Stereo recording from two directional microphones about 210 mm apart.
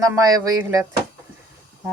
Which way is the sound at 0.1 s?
15° right (ahead or behind).